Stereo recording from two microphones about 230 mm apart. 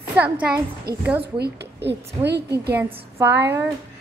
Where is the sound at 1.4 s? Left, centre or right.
Right.